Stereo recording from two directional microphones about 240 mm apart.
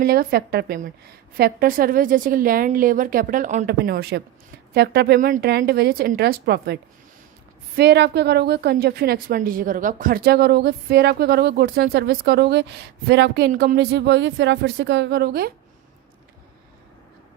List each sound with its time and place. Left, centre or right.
0.0 s a woman's voice: right
7.8 s a woman's voice: right